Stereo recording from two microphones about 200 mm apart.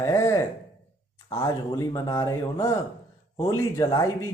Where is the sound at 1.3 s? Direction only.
15° left (ahead or behind).